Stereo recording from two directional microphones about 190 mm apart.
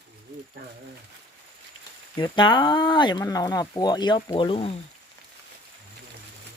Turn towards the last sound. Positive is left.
turn(degrees=30)  # may be behind; listen again after turning